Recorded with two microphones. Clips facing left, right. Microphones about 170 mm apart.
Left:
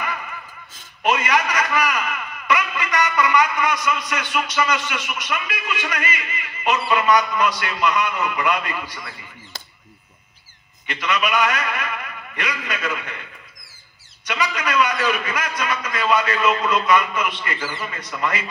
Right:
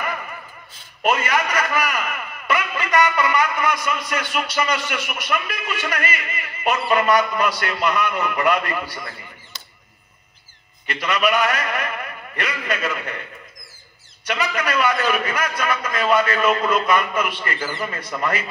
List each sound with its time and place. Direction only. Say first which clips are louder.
0.0 s a sound: right 1 dB; 45° right (ahead or behind)
1.0 s a man's voice: even; 50° right (ahead or behind)
10.9 s a man's voice: right 2 dB; 55° right (ahead or behind)
14.3 s a man's voice: even; 55° right (ahead or behind)